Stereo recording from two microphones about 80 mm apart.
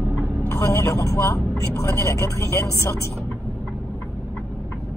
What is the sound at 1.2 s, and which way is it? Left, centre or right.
Speech, left.